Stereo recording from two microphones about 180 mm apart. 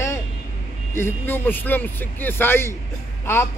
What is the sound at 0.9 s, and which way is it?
A man's voice, 15° left (ahead or behind).